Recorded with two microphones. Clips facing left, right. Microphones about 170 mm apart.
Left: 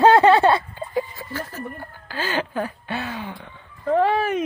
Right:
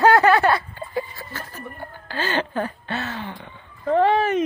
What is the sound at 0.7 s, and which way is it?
Speech, 15° left (ahead or behind).